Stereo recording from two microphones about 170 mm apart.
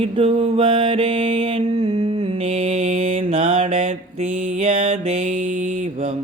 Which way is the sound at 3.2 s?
30° right (ahead or behind).